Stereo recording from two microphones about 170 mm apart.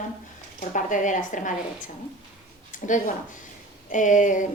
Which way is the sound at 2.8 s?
50° left (ahead or behind).